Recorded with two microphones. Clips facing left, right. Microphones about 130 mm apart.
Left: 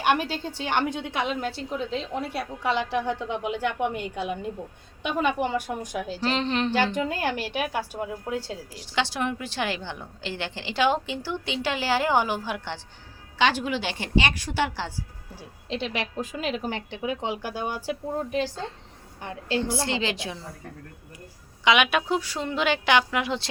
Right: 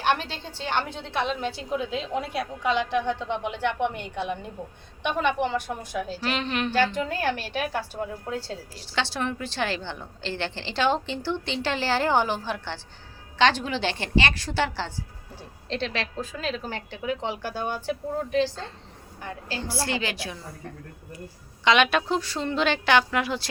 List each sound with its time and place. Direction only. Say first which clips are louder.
0.0 s a woman's voice: left 2 dB; 10° left (ahead or behind)
6.2 s a woman's voice: left 4 dB; 30° left (ahead or behind)
6.7 s a woman's voice: even; 15° left (ahead or behind)
19.2 s a woman's voice: left 6 dB; 25° left (ahead or behind)
21.6 s a woman's voice: right 1 dB; 10° left (ahead or behind)